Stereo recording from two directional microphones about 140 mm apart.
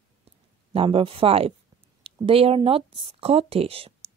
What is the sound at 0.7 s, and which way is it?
A woman's voice, 40° right (ahead or behind).